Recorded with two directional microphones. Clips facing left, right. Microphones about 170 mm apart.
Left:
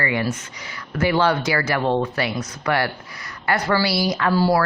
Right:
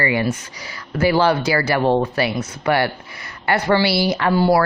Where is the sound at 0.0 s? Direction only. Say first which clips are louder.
Right 3 dB; 30° right (ahead or behind).